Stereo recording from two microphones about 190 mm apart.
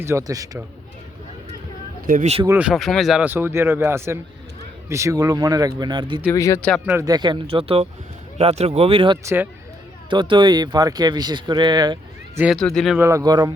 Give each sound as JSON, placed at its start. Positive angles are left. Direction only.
{"t": 0.0, "sound": "speech", "side_deg": -15}
{"t": 2.0, "sound": "speech", "side_deg": -45}
{"t": 2.6, "sound": "speech", "side_deg": 0}
{"t": 6.2, "sound": "speech", "side_deg": 15}
{"t": 6.6, "sound": "speech", "side_deg": 5}
{"t": 6.8, "sound": "speech", "side_deg": -15}
{"t": 9.2, "sound": "speech", "side_deg": -10}
{"t": 10.1, "sound": "speech", "side_deg": -25}
{"t": 12.4, "sound": "speech", "side_deg": 0}
{"t": 13.0, "sound": "speech", "side_deg": -15}